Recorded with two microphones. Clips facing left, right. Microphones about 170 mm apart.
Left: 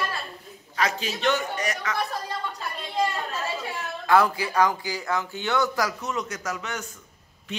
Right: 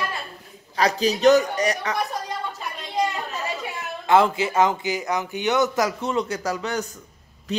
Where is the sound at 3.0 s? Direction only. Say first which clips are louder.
Right 1 dB; 20° right (ahead or behind); by 6.8 s 35° right (ahead or behind).